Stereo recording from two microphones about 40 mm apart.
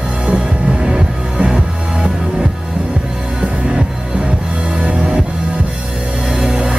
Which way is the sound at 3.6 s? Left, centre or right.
Right.